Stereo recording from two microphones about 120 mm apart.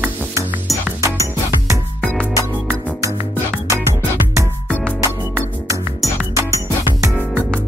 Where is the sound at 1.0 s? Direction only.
25° right (ahead or behind).